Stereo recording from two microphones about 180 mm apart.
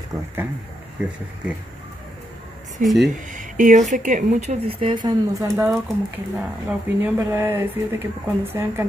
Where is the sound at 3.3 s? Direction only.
45° right (ahead or behind).